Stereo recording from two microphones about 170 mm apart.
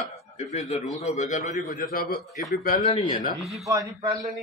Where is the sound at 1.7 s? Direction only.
55° left (ahead or behind).